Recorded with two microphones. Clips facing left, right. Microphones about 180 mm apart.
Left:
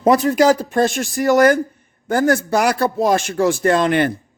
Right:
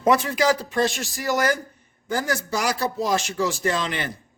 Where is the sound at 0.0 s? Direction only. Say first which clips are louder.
Left 6 dB; 35° left (ahead or behind); by 4.1 s 55° left (ahead or behind).